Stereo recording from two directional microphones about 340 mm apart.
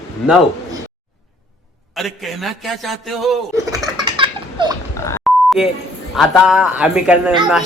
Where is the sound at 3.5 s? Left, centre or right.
Centre.